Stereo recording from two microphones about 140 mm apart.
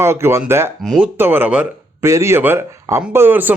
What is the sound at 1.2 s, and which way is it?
Speech, 15° right (ahead or behind).